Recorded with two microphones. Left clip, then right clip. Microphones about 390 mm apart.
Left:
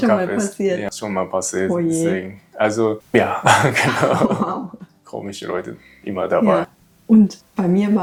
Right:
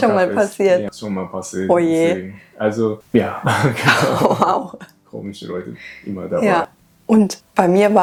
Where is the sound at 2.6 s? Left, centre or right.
Left.